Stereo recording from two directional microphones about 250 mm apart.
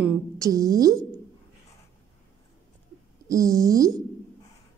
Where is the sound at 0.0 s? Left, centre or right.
Centre.